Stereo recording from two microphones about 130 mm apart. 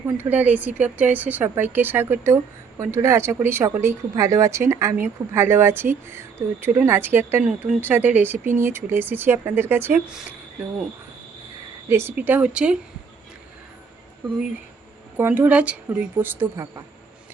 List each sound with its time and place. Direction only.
0.2 s speech: 15° right (ahead or behind)
11.9 s speech: 20° right (ahead or behind)
15.2 s speech: 15° right (ahead or behind)